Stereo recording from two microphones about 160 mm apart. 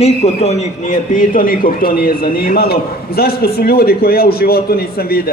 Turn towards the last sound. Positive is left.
turn(degrees=75)  # may be behind; listen again after turning